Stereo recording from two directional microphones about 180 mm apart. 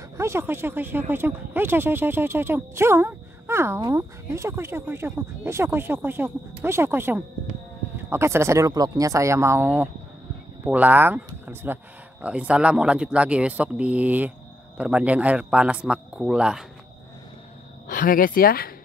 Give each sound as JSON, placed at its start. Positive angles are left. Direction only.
{"t": 0.2, "sound": "speech", "side_deg": -15}
{"t": 17.8, "sound": "speech", "side_deg": 50}